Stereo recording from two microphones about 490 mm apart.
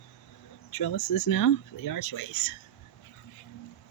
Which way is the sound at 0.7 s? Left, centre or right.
Left.